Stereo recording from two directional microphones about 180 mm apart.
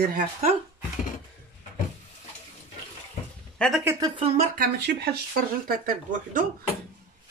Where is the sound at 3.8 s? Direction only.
20° right (ahead or behind).